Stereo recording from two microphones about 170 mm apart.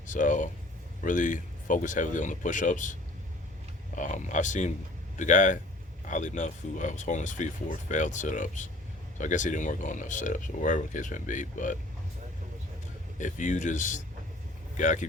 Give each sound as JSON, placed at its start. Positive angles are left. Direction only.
{"t": 0.1, "sound": "speech", "side_deg": 50}
{"t": 13.1, "sound": "speech", "side_deg": 50}